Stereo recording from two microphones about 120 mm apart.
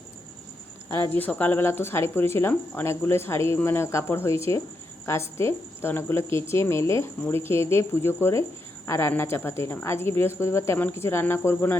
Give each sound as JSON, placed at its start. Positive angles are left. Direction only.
{"t": 0.9, "sound": "speech", "side_deg": 30}
{"t": 1.1, "sound": "speech", "side_deg": 15}